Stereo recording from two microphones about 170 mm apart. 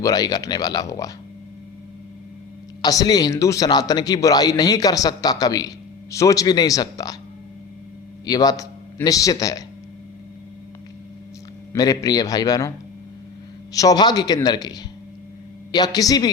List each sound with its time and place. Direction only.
0.0 s a man's voice: 20° left (ahead or behind)
2.8 s a man's voice: 20° left (ahead or behind)
8.3 s a man's voice: 20° left (ahead or behind)
11.7 s a man's voice: 20° left (ahead or behind)
13.7 s a man's voice: 25° left (ahead or behind)